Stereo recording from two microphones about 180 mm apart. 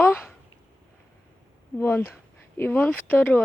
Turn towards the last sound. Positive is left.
turn(degrees=10)  # may be behind; listen again after turning